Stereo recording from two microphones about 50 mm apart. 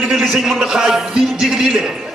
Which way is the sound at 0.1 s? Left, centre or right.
Centre.